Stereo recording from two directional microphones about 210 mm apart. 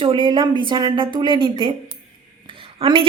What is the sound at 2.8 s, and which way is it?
Speech, 25° right (ahead or behind).